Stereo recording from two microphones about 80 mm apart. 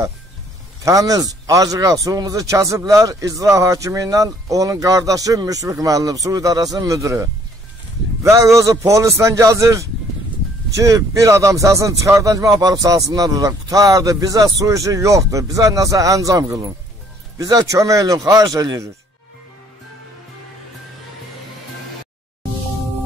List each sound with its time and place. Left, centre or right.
0.8 s a man's voice: right